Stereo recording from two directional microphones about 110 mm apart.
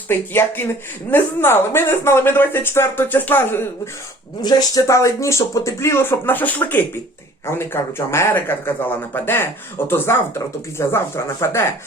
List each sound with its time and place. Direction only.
0.1 s speech: 20° left (ahead or behind)
4.4 s speech: 35° left (ahead or behind)